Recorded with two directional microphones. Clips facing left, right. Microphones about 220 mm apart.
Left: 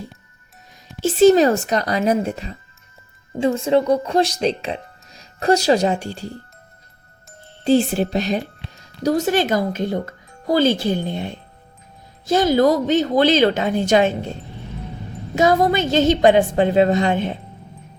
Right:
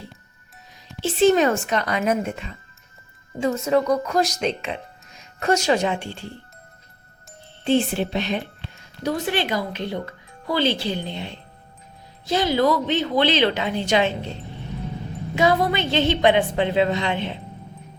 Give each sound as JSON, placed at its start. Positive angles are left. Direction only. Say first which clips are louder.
{"t": 1.0, "sound": "speech", "louder": "left 5 dB", "side_deg": 40}
{"t": 7.6, "sound": "speech", "louder": "left 4 dB", "side_deg": 40}
{"t": 15.4, "sound": "speech", "louder": "left 4 dB", "side_deg": 45}